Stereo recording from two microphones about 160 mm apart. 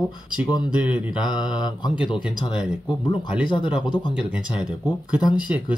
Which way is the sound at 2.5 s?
5° right (ahead or behind).